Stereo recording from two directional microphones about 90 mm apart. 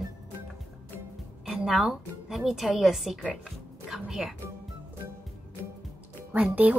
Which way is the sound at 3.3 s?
5° right (ahead or behind).